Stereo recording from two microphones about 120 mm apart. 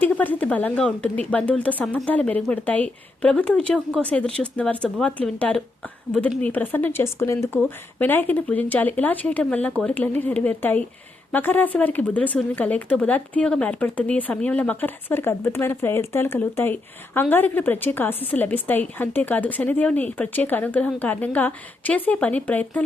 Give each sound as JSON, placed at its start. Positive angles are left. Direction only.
{"t": 0.0, "sound": "speech", "side_deg": 15}